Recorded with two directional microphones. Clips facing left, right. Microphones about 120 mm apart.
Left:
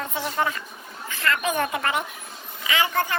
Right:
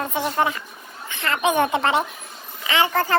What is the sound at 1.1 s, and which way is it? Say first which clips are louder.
A woman's voice: right 4 dB; 20° right (ahead or behind).